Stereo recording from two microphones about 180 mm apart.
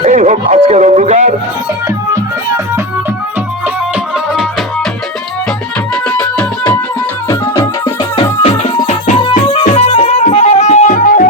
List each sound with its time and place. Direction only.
0.0 s speech: 40° right (ahead or behind)
5.9 s music: 5° left (ahead or behind)
7.3 s music: 20° left (ahead or behind); by 11.3 s 50° left (ahead or behind)